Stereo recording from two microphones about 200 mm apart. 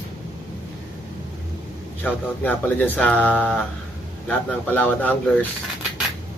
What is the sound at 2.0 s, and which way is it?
Speech, 10° left (ahead or behind).